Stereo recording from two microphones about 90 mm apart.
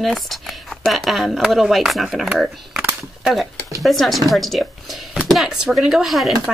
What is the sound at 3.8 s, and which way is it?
Speech, centre (ahead or behind).